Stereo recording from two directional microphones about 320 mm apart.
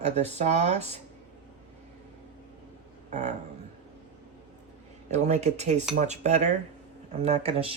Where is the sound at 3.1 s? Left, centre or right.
Right.